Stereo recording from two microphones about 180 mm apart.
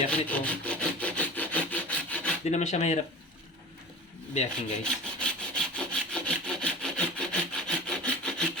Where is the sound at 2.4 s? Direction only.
40° left (ahead or behind).